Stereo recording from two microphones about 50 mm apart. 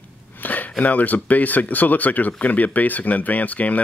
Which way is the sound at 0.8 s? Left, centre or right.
Left.